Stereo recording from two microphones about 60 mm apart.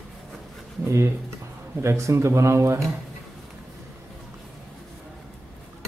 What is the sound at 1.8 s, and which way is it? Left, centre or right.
Speech, right.